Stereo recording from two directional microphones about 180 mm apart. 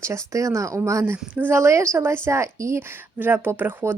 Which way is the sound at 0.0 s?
15° right (ahead or behind).